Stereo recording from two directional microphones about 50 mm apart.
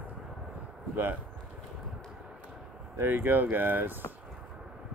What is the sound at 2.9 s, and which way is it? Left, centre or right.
Speech, right.